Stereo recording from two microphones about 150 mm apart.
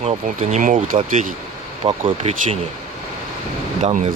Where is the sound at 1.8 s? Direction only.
40° right (ahead or behind).